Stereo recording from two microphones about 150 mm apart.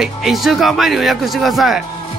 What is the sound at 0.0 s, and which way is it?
Speech, centre (ahead or behind).